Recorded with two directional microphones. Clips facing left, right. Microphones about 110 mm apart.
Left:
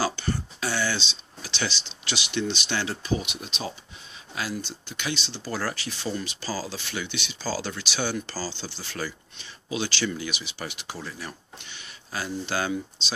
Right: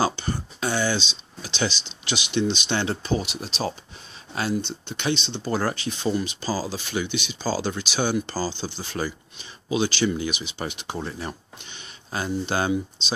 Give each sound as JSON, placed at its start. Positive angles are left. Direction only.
{"t": 0.0, "sound": "speech", "side_deg": -20}